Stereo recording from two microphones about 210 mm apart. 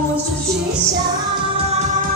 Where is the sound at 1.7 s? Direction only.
35° right (ahead or behind).